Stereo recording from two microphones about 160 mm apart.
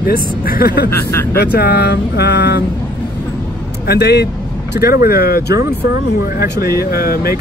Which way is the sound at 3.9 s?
90° left.